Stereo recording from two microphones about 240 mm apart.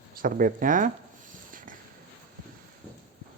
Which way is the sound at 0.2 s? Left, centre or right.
Right.